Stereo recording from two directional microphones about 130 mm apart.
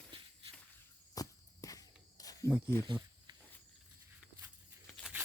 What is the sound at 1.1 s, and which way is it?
Walk, 25° left (ahead or behind).